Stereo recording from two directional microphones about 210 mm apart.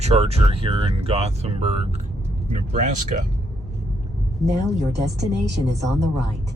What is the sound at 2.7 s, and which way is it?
Speech, 35° right (ahead or behind).